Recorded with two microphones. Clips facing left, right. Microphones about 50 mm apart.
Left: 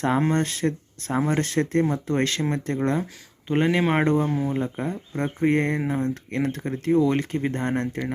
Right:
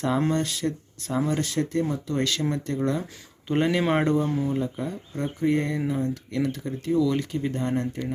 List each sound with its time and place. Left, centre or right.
0.3 s speech: left
3.0 s speech: centre
4.0 s speech: left
4.3 s speech: centre
4.5 s speech: left